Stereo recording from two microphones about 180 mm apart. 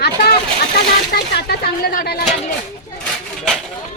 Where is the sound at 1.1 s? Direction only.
60° left (ahead or behind).